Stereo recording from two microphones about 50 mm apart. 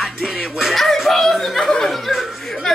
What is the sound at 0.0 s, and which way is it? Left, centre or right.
A man's voice, centre.